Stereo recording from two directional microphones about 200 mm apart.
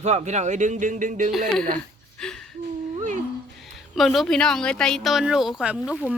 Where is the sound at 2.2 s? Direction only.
5° left (ahead or behind).